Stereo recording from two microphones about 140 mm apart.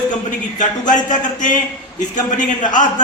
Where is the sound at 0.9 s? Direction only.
65° left (ahead or behind).